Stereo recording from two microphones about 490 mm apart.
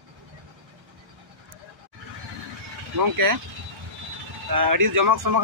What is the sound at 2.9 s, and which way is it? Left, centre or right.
Speech, right.